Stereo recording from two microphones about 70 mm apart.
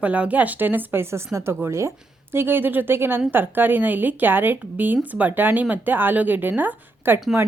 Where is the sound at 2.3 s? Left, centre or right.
Right.